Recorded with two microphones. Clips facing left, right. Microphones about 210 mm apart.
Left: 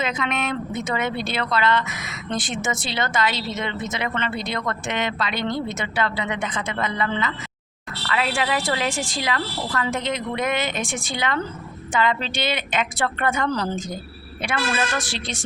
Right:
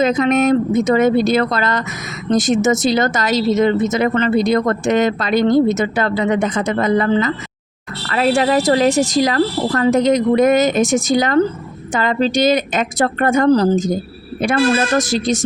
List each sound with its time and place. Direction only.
0.0 s a woman's voice: 40° right (ahead or behind)